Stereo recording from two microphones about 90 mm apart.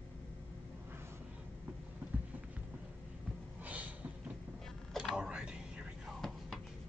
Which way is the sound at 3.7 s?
15° right (ahead or behind).